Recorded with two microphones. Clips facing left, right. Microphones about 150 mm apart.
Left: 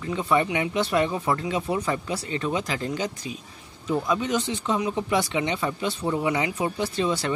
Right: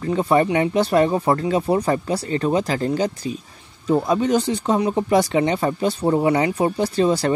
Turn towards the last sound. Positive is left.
turn(degrees=-40)  # may be behind; listen again after turning